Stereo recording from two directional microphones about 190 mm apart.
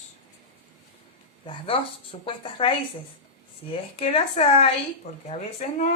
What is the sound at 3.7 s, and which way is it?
Speech, 30° left (ahead or behind).